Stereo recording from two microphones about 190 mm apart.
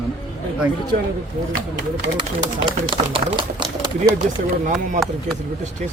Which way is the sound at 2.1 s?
25° right (ahead or behind).